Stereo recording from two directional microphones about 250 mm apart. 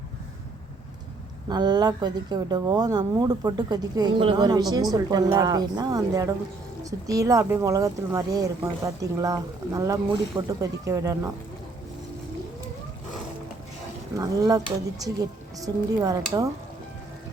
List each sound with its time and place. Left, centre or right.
1.5 s speech: centre
14.2 s speech: centre